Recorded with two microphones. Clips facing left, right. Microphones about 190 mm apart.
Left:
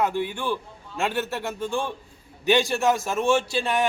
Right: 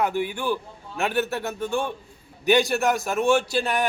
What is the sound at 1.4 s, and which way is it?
Speech, 25° left (ahead or behind).